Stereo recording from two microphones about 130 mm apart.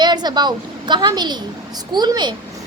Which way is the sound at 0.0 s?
35° right (ahead or behind).